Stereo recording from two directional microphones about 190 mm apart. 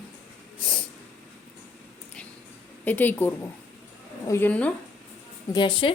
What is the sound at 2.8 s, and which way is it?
A woman's voice, 10° left (ahead or behind).